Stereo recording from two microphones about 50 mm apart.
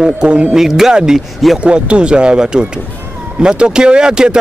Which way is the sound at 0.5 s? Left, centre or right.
Centre.